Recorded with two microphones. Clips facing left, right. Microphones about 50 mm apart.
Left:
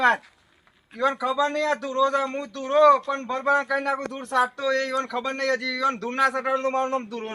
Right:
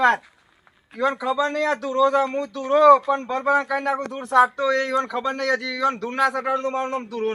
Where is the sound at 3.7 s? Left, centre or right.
Centre.